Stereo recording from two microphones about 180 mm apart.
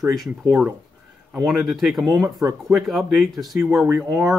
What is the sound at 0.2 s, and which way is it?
Speech, centre (ahead or behind).